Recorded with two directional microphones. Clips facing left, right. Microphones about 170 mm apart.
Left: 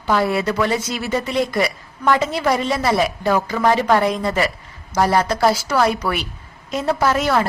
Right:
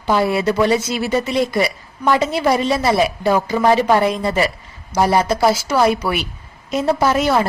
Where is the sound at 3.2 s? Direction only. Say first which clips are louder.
Right 3 dB; 10° right (ahead or behind).